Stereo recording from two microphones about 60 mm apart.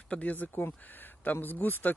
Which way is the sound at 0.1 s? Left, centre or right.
Left.